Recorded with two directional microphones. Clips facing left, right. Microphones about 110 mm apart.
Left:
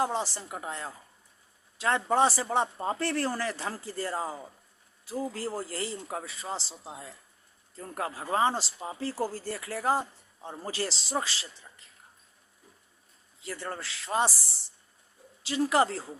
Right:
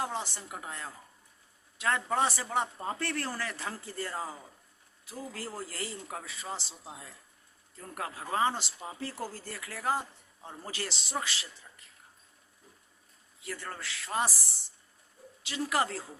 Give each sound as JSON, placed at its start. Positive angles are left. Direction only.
{"t": 0.0, "sound": "speech", "side_deg": 30}
{"t": 13.4, "sound": "speech", "side_deg": 30}